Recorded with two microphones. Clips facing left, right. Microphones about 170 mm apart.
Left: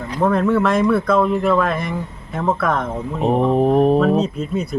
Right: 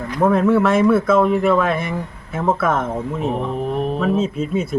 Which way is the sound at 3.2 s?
40° left (ahead or behind).